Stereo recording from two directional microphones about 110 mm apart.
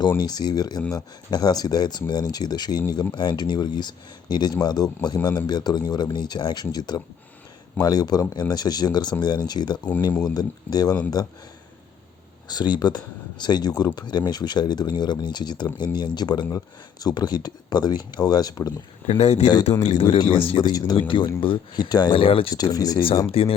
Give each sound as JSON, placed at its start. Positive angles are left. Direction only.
{"t": 0.2, "sound": "speech", "side_deg": 40}
{"t": 12.5, "sound": "speech", "side_deg": 40}
{"t": 19.0, "sound": "speech", "side_deg": 70}
{"t": 20.1, "sound": "speech", "side_deg": 50}
{"t": 20.7, "sound": "speech", "side_deg": 40}
{"t": 22.1, "sound": "speech", "side_deg": 55}
{"t": 22.7, "sound": "speech", "side_deg": 35}
{"t": 23.3, "sound": "speech", "side_deg": 60}